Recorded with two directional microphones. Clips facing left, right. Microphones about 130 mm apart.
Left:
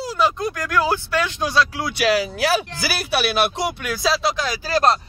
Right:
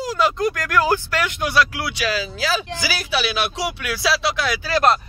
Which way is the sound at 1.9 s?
65° left (ahead or behind).